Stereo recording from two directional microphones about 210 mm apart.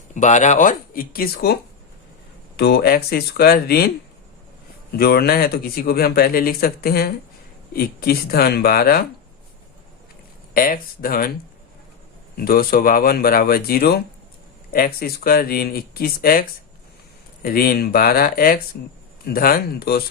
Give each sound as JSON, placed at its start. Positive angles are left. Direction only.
{"t": 0.1, "sound": "speech", "side_deg": 35}
{"t": 2.6, "sound": "speech", "side_deg": 50}
{"t": 10.5, "sound": "speech", "side_deg": 45}
{"t": 12.4, "sound": "speech", "side_deg": 45}